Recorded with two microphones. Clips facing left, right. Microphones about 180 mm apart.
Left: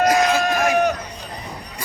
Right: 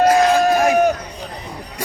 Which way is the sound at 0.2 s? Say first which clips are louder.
Right 4 dB; 35° right (ahead or behind).